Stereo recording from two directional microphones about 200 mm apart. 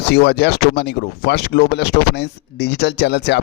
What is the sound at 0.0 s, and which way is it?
Speech, 55° left (ahead or behind).